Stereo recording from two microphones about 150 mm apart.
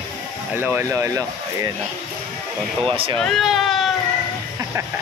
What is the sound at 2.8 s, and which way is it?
Speech, 35° right (ahead or behind).